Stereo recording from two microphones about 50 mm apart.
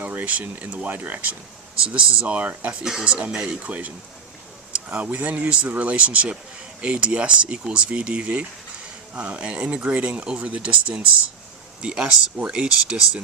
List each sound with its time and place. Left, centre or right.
0.0 s speech: right